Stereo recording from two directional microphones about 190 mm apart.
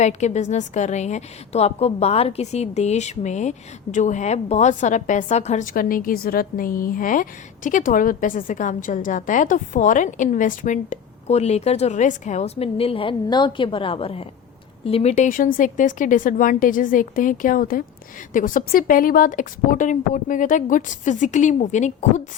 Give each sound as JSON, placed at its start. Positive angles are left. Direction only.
{"t": 0.0, "sound": "a woman's voice", "side_deg": 35}